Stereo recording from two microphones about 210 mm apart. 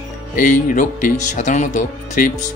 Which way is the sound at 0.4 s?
35° left (ahead or behind).